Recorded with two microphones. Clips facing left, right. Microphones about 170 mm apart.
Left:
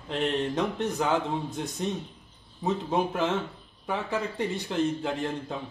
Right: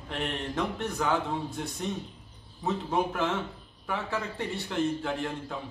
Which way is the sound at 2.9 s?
15° left (ahead or behind).